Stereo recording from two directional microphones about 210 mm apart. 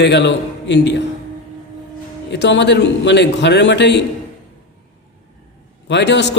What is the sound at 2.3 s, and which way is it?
A man's voice, 55° left (ahead or behind).